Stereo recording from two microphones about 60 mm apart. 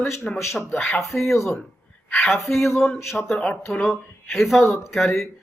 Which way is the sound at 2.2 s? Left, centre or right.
Centre.